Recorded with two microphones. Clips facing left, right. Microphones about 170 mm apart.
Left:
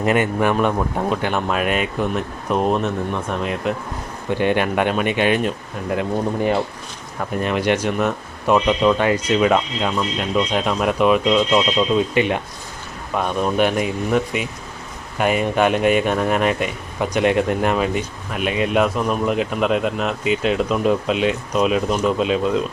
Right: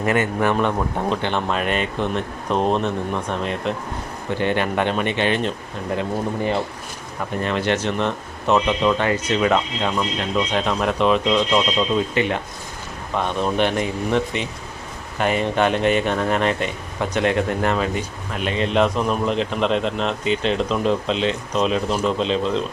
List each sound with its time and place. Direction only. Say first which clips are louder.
0.0 s a man's voice: left 2 dB; 20° left (ahead or behind)
4.4 s speech: left 2 dB; 15° left (ahead or behind)
7.4 s speech: left 2 dB; 15° left (ahead or behind)